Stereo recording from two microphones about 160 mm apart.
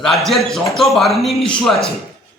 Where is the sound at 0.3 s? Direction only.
Centre (ahead or behind).